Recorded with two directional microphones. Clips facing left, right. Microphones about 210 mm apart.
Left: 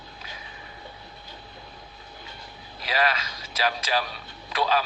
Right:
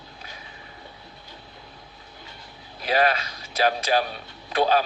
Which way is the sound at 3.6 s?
40° right (ahead or behind).